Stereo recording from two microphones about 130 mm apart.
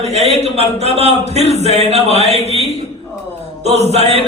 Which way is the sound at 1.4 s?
55° right (ahead or behind).